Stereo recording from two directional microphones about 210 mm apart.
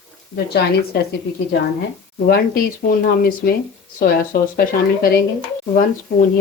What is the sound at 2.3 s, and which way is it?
Speech, 45° left (ahead or behind).